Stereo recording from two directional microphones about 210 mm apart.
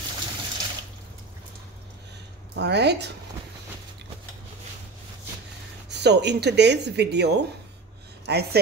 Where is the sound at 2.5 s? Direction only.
55° right (ahead or behind).